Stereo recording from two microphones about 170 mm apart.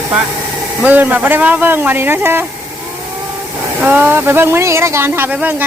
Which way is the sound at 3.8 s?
10° right (ahead or behind).